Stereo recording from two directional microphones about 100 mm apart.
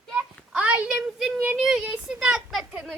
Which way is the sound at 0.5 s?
10° right (ahead or behind).